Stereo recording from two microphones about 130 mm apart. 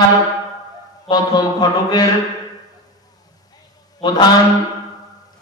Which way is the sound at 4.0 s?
30° left (ahead or behind).